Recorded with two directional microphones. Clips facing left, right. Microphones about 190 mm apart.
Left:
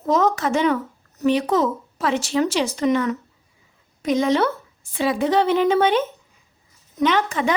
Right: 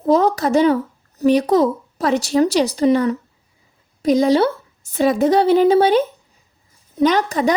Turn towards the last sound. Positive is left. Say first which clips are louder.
# right 4 dB
turn(degrees=-40)  # may be behind; listen again after turning